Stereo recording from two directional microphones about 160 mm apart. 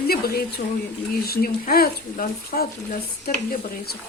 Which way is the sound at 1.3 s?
70° left (ahead or behind).